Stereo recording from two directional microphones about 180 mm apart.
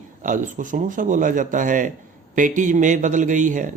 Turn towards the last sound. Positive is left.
turn(degrees=-45)  # may be behind; listen again after turning